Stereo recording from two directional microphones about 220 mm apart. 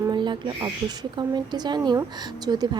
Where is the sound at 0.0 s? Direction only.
20° right (ahead or behind).